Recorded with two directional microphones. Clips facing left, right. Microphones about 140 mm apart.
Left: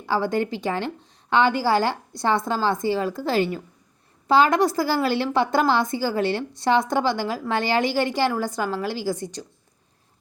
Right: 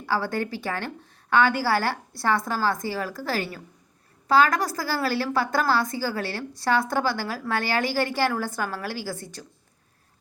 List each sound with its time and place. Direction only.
0.0 s a woman's voice: 15° left (ahead or behind)